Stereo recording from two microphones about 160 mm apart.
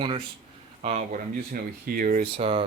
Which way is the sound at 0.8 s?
45° right (ahead or behind).